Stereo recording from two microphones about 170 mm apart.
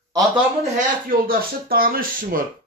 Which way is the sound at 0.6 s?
50° right (ahead or behind).